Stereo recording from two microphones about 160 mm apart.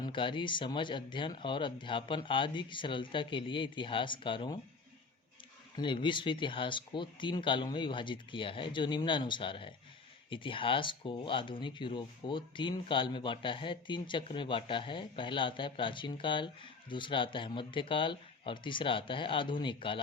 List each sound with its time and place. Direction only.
0.0 s speech: 30° left (ahead or behind)
5.7 s speech: 30° left (ahead or behind)